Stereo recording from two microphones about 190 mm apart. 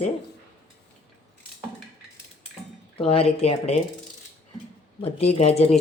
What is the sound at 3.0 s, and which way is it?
Speech, 30° left (ahead or behind).